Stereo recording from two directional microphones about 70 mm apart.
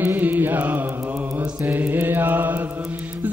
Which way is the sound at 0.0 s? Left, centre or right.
Right.